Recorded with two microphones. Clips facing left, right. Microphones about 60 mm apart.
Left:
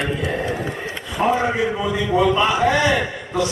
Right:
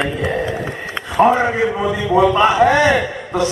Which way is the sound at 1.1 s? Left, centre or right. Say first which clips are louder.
Right 6 dB; right.